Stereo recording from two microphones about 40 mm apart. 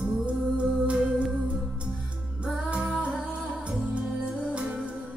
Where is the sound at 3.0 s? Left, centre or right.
Right.